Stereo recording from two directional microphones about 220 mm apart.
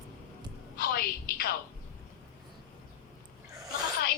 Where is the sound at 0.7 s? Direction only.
45° left (ahead or behind).